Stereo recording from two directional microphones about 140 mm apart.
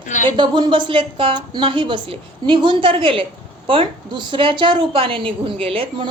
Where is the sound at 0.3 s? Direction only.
35° right (ahead or behind).